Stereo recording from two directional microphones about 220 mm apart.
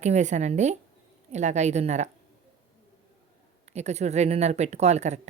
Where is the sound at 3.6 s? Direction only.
30° right (ahead or behind).